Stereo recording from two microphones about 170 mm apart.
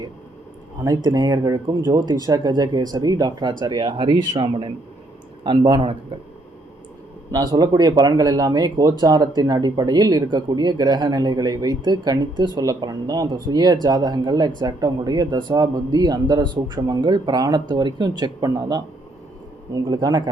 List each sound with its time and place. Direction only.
0.8 s speech: 25° right (ahead or behind)
7.3 s speech: 25° right (ahead or behind)